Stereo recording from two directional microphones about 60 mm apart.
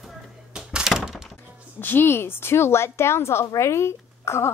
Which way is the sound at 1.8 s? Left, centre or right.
Left.